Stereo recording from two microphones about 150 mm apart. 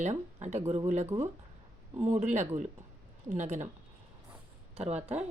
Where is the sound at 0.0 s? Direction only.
50° right (ahead or behind).